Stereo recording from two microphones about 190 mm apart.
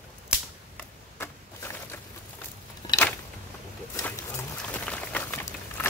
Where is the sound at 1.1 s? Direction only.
10° left (ahead or behind).